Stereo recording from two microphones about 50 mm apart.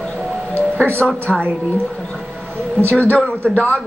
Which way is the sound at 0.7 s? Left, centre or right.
Left.